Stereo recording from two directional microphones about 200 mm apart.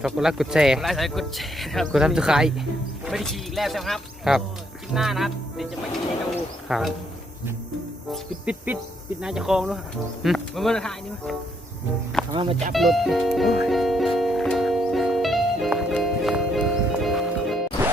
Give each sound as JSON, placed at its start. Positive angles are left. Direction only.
{"t": 0.0, "sound": "speech", "side_deg": 0}
{"t": 6.7, "sound": "speech", "side_deg": 0}
{"t": 8.1, "sound": "speech", "side_deg": -5}
{"t": 12.3, "sound": "speech", "side_deg": -25}
{"t": 12.7, "sound": "speech", "side_deg": 0}
{"t": 13.6, "sound": "music", "side_deg": 0}